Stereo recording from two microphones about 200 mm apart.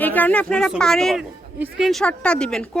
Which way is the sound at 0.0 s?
10° left (ahead or behind).